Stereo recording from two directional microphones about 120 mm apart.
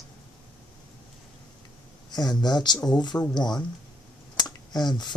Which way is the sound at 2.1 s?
35° left (ahead or behind).